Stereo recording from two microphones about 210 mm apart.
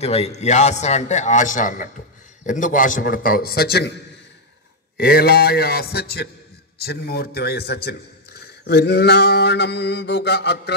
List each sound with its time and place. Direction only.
0.0 s a man's voice: 30° left (ahead or behind); by 3.9 s 50° left (ahead or behind)
4.9 s a man's voice: 50° left (ahead or behind)